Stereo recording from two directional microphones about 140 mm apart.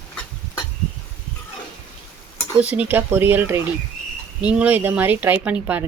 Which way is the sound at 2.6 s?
10° right (ahead or behind).